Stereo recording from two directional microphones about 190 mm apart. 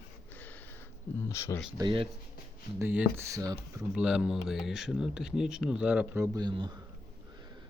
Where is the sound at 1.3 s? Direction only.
15° left (ahead or behind).